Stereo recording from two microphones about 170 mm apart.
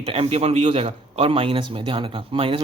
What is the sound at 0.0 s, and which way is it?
A man's voice, 35° right (ahead or behind).